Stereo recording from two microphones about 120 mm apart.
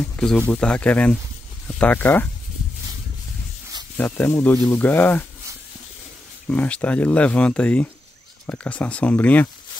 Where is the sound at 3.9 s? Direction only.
15° left (ahead or behind).